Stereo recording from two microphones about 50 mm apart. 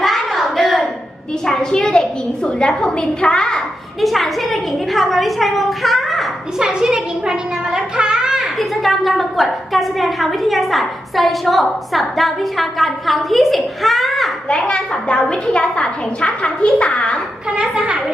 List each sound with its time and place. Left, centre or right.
0.0 s hands: centre
1.5 s a woman's voice: centre
4.0 s a woman's voice: centre
6.7 s a woman's voice: centre
8.4 s a woman's voice: centre
14.5 s a woman's voice: centre
17.6 s a woman's voice: centre